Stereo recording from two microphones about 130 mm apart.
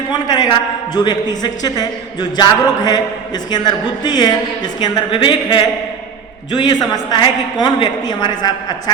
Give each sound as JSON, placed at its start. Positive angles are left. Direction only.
{"t": 0.1, "sound": "a man's voice", "side_deg": 35}